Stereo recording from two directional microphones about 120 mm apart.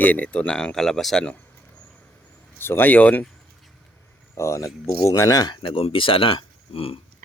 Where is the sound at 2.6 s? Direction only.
20° left (ahead or behind).